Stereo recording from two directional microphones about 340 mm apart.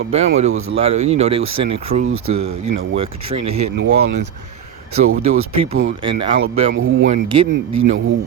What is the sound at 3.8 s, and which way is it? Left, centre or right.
Speech, right.